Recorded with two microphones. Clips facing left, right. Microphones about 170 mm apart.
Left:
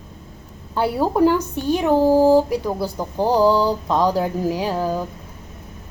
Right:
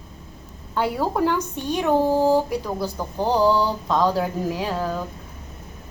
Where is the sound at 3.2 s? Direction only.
10° left (ahead or behind).